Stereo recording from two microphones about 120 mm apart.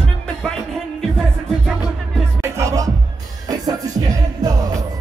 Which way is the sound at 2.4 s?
25° right (ahead or behind).